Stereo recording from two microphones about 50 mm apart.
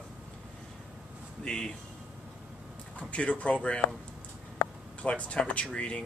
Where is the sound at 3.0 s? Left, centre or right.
Left.